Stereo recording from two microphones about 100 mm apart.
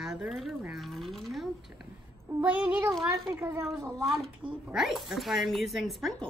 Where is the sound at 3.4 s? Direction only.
25° right (ahead or behind).